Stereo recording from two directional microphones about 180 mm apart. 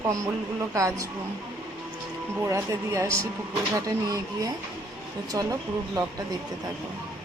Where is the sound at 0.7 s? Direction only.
15° right (ahead or behind).